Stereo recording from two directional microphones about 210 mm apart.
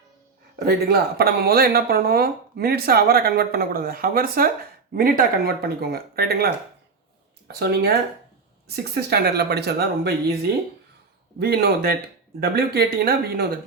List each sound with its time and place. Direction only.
0.6 s speech: 50° right (ahead or behind)
11.3 s speech: 45° right (ahead or behind)